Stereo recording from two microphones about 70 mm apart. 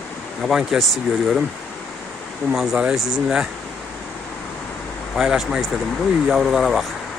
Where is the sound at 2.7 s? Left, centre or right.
Centre.